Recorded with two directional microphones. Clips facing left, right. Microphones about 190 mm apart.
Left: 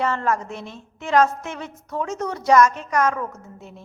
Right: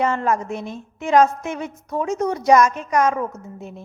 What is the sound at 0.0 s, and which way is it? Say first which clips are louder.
A woman's voice: right 2 dB; 15° right (ahead or behind).